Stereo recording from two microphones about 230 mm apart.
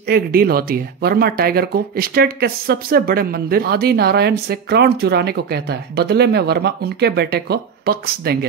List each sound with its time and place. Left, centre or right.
0.1 s speech: right